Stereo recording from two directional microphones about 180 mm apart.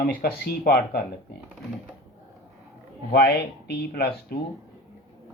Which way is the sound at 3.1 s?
65° left (ahead or behind).